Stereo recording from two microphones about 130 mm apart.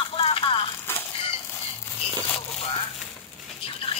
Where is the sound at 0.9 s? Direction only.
20° left (ahead or behind).